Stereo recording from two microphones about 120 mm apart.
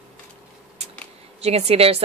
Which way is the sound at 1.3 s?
60° right (ahead or behind).